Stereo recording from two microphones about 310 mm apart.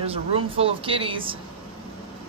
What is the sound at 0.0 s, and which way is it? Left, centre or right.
Speech, centre.